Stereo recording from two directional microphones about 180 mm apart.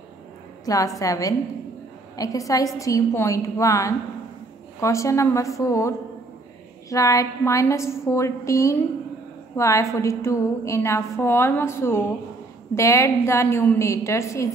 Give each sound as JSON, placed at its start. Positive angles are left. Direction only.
{"t": 0.7, "sound": "a woman's voice", "side_deg": 20}